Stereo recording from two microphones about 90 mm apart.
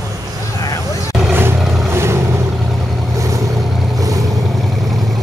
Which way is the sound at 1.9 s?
30° right (ahead or behind).